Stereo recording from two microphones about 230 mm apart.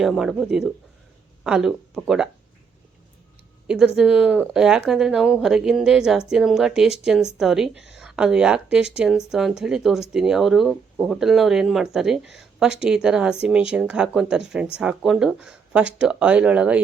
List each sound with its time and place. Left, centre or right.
0.0 s a woman's voice: centre
3.7 s a woman's voice: centre